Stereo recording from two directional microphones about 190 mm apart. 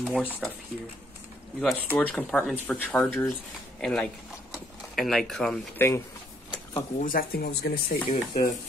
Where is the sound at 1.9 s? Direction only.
10° left (ahead or behind).